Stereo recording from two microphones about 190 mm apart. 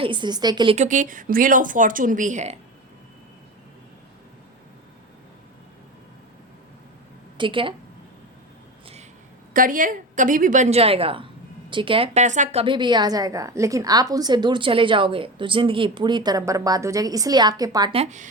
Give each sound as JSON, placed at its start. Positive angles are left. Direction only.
{"t": 0.0, "sound": "a woman's voice", "side_deg": -25}
{"t": 0.8, "sound": "speech", "side_deg": -40}
{"t": 7.3, "sound": "a woman's voice", "side_deg": -25}
{"t": 9.5, "sound": "a woman's voice", "side_deg": -45}
{"t": 18.0, "sound": "a woman's voice", "side_deg": -40}